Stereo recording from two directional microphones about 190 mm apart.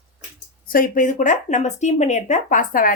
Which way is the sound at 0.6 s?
45° left (ahead or behind).